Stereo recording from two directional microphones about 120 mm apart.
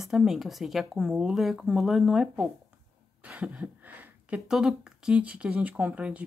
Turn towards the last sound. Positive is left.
turn(degrees=-10)  # may be behind; listen again after turning